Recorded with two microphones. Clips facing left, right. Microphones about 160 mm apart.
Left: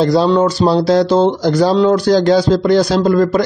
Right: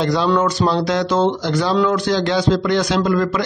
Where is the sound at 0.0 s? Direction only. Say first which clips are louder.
Left 5 dB; 35° left (ahead or behind).